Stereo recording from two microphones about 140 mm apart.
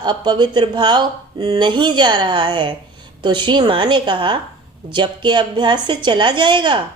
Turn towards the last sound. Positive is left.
turn(degrees=-35)  # may be behind; listen again after turning